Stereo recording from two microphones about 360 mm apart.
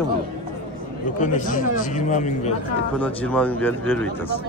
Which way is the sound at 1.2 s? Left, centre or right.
Left.